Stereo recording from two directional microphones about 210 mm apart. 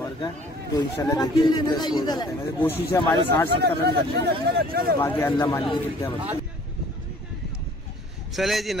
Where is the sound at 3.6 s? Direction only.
50° right (ahead or behind).